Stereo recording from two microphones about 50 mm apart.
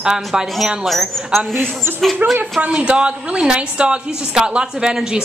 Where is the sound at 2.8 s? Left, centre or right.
Right.